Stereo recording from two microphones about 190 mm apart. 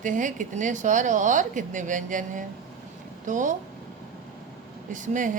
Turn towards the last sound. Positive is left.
turn(degrees=-40)  # may be behind; listen again after turning